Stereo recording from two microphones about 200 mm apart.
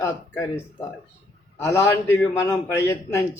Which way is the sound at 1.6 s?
15° left (ahead or behind).